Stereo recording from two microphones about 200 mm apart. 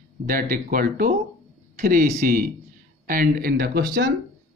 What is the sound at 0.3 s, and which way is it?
Speech, 45° right (ahead or behind).